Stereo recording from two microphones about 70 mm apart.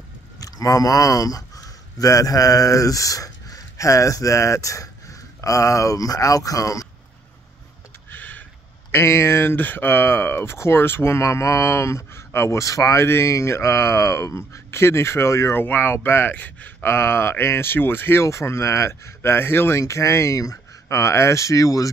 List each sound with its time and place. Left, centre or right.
0.4 s speech: left
8.1 s a sound: left
8.9 s speech: left
13.0 s speech: left
18.2 s speech: left
19.8 s speech: left